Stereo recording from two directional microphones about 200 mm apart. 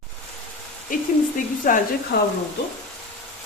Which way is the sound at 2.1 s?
55° left (ahead or behind).